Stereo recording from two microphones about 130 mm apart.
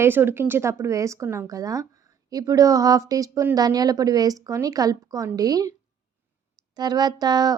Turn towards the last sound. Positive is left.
turn(degrees=-30)  # may be behind; listen again after turning